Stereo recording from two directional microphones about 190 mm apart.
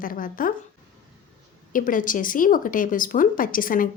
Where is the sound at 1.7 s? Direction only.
45° left (ahead or behind).